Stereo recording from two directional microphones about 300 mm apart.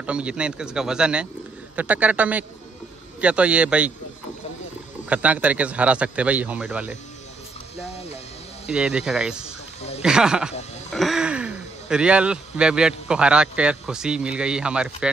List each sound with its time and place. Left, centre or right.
0.0 s speech: centre
5.1 s speech: centre
8.6 s speech: centre
9.8 s speech: left
10.0 s speech: centre